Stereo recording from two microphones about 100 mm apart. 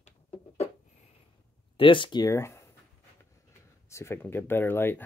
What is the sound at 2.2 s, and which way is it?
Speech, 25° left (ahead or behind).